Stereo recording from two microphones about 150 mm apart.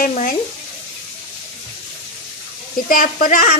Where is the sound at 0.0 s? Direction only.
60° left (ahead or behind).